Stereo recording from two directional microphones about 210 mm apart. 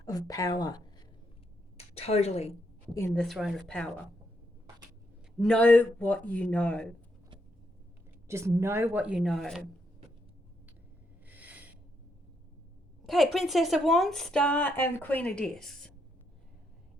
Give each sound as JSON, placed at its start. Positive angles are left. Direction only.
{"t": 0.0, "sound": "speech", "side_deg": 15}
{"t": 2.0, "sound": "a woman's voice", "side_deg": 30}
{"t": 3.2, "sound": "a woman's voice", "side_deg": 0}
{"t": 5.4, "sound": "speech", "side_deg": 5}
{"t": 8.3, "sound": "a woman's voice", "side_deg": -15}
{"t": 11.3, "sound": "a sound", "side_deg": -5}
{"t": 13.1, "sound": "a woman's voice", "side_deg": 0}